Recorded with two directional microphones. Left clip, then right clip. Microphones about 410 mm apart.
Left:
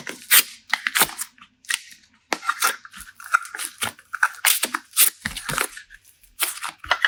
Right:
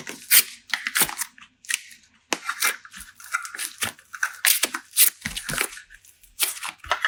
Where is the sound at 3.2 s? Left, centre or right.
Centre.